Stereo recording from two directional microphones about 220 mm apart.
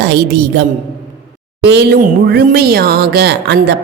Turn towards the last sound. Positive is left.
turn(degrees=-45)  # may be behind; listen again after turning